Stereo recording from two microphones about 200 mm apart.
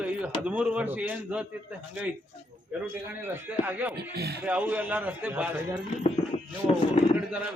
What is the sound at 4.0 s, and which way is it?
Speech, 55° right (ahead or behind).